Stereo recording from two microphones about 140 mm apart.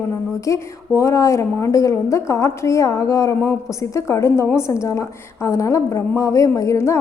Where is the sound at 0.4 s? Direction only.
20° left (ahead or behind).